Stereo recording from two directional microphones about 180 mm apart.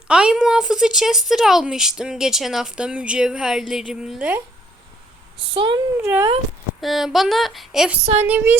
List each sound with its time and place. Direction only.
0.1 s speech: 5° right (ahead or behind)
5.5 s speech: 30° right (ahead or behind)
6.0 s speech: 15° right (ahead or behind)
6.8 s speech: centre (ahead or behind)